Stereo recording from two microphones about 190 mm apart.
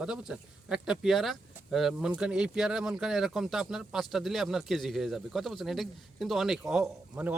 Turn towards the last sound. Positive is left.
turn(degrees=-5)  # may be behind; listen again after turning